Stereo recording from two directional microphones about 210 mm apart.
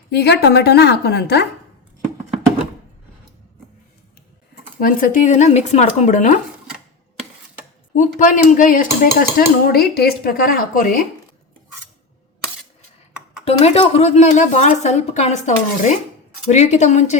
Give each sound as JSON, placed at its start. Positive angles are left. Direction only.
{"t": 0.1, "sound": "speech", "side_deg": 50}
{"t": 4.8, "sound": "a woman's voice", "side_deg": 40}
{"t": 7.9, "sound": "a woman's voice", "side_deg": 40}
{"t": 13.4, "sound": "a woman's voice", "side_deg": 30}